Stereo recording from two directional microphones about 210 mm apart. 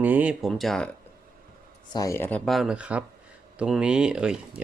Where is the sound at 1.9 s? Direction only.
15° left (ahead or behind).